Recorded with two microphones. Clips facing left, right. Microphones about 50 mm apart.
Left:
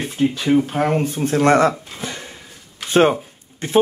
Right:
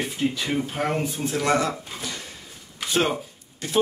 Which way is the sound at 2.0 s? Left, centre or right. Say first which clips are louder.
Left 4 dB; left.